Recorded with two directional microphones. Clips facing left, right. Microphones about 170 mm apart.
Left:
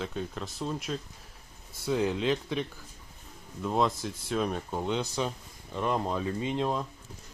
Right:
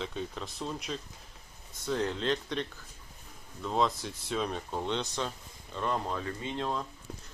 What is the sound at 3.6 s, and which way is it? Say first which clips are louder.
Speech: left 2 dB; 5° left (ahead or behind).